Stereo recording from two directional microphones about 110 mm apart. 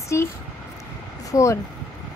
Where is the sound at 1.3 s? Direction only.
30° left (ahead or behind).